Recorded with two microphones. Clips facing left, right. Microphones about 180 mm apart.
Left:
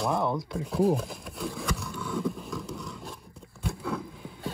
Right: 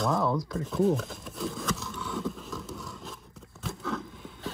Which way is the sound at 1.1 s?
Centre (ahead or behind).